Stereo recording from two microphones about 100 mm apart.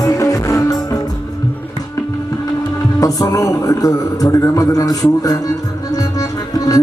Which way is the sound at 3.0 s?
35° left (ahead or behind).